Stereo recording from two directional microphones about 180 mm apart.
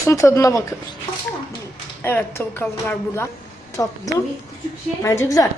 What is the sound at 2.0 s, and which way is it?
Speech, 15° left (ahead or behind).